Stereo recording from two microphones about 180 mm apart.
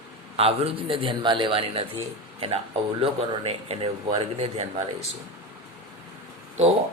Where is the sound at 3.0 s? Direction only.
35° right (ahead or behind).